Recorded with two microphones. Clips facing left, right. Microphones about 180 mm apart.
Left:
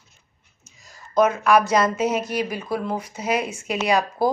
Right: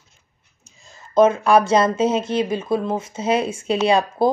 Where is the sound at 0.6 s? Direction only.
25° right (ahead or behind).